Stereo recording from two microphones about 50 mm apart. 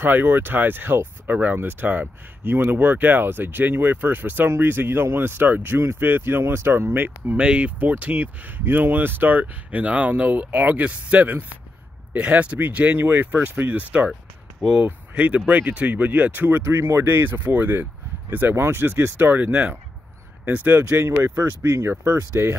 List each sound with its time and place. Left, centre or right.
0.0 s speech: right
7.3 s speech: right
7.8 s speech: right
15.1 s speech: right
16.7 s speech: right
17.0 s speech: right
18.6 s speech: right
19.2 s speech: right
20.8 s speech: right
21.8 s speech: right